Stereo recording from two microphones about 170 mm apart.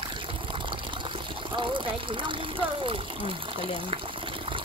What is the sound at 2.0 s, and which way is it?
Speech, 30° right (ahead or behind).